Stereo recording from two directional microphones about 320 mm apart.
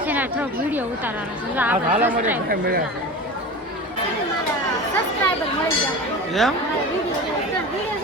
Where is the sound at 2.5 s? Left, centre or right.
Right.